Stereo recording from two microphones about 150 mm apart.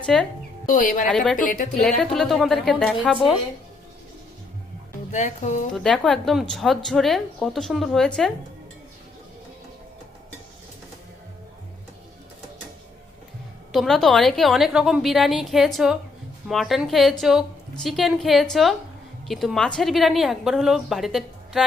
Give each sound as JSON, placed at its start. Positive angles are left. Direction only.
{"t": 0.0, "sound": "speech", "side_deg": 5}
{"t": 0.7, "sound": "speech", "side_deg": 60}
{"t": 1.0, "sound": "a woman's voice", "side_deg": 5}
{"t": 1.4, "sound": "speech", "side_deg": 65}
{"t": 1.8, "sound": "a woman's voice", "side_deg": 5}
{"t": 5.1, "sound": "speech", "side_deg": 50}
{"t": 5.7, "sound": "a woman's voice", "side_deg": 5}
{"t": 13.7, "sound": "a woman's voice", "side_deg": 0}